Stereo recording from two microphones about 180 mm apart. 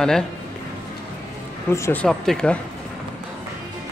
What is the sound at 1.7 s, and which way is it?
Speech, 15° left (ahead or behind).